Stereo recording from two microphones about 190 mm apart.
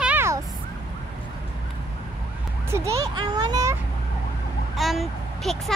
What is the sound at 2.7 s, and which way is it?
Speech, 15° right (ahead or behind).